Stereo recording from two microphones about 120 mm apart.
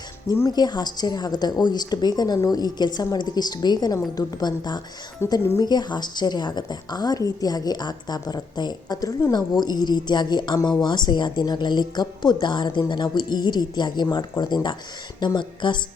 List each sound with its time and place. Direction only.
0.3 s a woman's voice: 30° left (ahead or behind)